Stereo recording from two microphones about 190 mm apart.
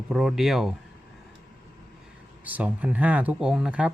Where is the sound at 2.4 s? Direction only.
10° right (ahead or behind).